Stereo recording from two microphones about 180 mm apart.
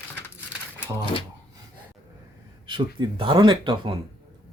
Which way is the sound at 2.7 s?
25° right (ahead or behind).